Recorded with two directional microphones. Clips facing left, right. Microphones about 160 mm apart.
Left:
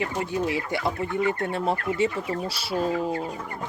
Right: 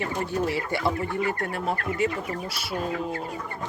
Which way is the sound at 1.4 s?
25° left (ahead or behind).